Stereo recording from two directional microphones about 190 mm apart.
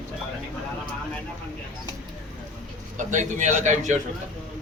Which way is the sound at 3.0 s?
40° right (ahead or behind).